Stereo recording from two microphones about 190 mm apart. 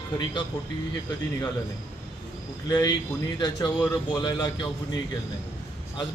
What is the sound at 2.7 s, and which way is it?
Speech, 20° left (ahead or behind).